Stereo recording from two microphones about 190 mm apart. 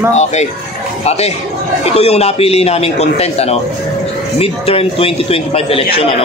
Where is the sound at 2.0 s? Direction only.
35° left (ahead or behind).